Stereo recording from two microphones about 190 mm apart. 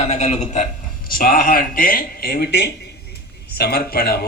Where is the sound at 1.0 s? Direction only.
50° left (ahead or behind).